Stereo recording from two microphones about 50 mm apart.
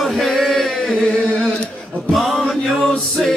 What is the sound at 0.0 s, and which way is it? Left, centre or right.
Chant, centre.